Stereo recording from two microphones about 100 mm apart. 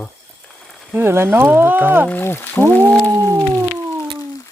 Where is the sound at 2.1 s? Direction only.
20° left (ahead or behind).